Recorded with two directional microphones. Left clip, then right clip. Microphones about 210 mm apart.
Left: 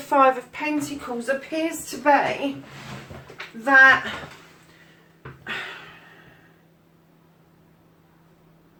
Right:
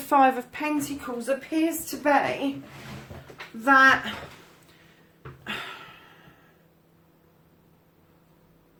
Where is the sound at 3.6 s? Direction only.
45° right (ahead or behind).